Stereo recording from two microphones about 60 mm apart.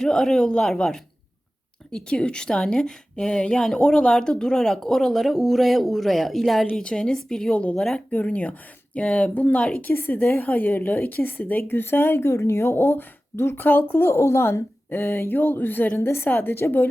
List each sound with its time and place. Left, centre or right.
0.0 s a woman's voice: centre
9.9 s a woman's voice: left
14.8 s a woman's voice: left
16.0 s a woman's voice: left